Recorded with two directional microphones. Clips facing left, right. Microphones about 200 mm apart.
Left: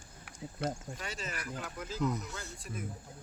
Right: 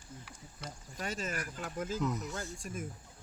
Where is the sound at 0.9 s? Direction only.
45° right (ahead or behind).